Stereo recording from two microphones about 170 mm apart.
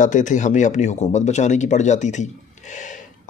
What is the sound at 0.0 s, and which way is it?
Speech, 45° left (ahead or behind).